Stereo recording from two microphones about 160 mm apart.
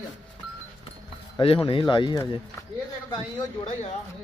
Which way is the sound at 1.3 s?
30° left (ahead or behind).